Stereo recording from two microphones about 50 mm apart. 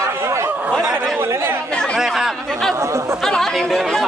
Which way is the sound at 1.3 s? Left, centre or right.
Right.